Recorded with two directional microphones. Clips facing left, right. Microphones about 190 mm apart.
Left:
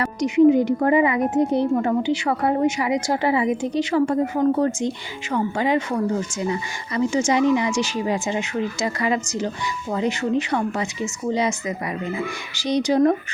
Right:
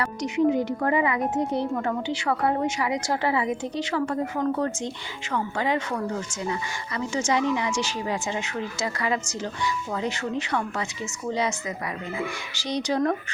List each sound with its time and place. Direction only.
0.2 s a woman's voice: 15° left (ahead or behind)
12.6 s a woman's voice: 15° left (ahead or behind)